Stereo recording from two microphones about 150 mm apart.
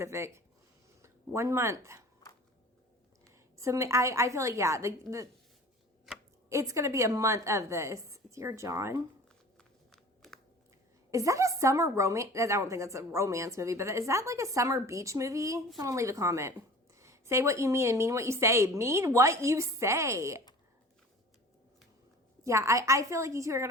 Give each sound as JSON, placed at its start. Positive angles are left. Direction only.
{"t": 0.0, "sound": "speech", "side_deg": -20}
{"t": 3.5, "sound": "a woman's voice", "side_deg": -20}
{"t": 6.1, "sound": "a sound", "side_deg": 0}
{"t": 6.5, "sound": "a woman's voice", "side_deg": -20}
{"t": 9.9, "sound": "a sound", "side_deg": 5}
{"t": 11.1, "sound": "a woman's voice", "side_deg": -20}
{"t": 22.4, "sound": "a woman's voice", "side_deg": -20}